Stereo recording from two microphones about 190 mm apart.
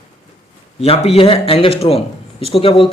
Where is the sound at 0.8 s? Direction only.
30° left (ahead or behind).